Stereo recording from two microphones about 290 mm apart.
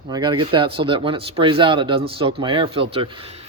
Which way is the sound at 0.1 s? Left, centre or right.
Centre.